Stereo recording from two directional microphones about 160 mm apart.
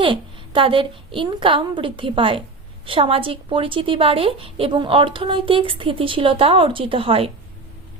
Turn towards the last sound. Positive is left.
turn(degrees=-35)  # may be behind; listen again after turning